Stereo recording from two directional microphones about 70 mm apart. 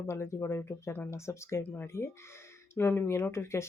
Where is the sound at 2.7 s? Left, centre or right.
Left.